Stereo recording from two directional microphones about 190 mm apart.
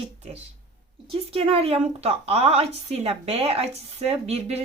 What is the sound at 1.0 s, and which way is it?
Speech, 30° right (ahead or behind).